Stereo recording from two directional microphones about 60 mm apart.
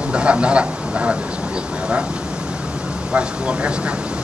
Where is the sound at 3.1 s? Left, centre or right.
Centre.